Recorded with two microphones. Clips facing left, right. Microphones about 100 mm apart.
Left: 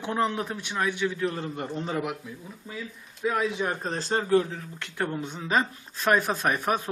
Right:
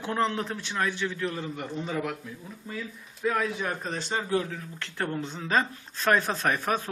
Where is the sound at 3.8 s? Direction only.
35° left (ahead or behind).